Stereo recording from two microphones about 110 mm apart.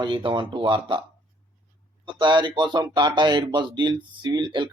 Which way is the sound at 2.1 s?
45° right (ahead or behind).